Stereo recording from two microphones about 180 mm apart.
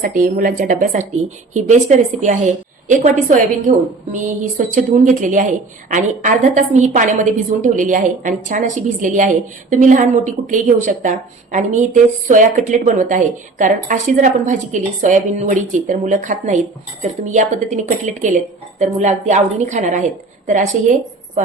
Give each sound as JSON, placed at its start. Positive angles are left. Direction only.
{"t": 0.0, "sound": "a woman's voice", "side_deg": -50}